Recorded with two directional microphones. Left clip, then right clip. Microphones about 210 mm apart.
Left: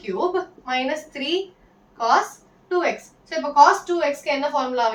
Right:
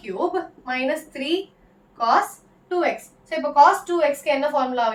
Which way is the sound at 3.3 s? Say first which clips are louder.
Even; 20° right (ahead or behind).